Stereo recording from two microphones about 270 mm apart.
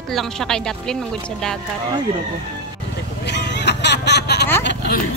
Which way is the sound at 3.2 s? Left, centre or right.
Left.